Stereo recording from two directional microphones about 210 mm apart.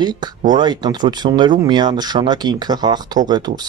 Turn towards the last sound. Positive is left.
turn(degrees=-20)  # may be behind; listen again after turning